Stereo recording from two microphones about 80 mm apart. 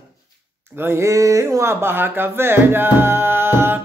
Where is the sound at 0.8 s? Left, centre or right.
Right.